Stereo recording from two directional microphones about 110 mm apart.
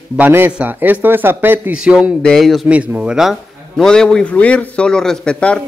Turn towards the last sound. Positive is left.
turn(degrees=10)  # may be behind; listen again after turning